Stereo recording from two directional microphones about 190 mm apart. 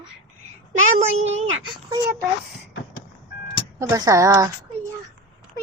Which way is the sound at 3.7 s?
15° right (ahead or behind).